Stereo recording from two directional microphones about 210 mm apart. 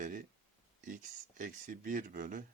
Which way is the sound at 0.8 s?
40° right (ahead or behind).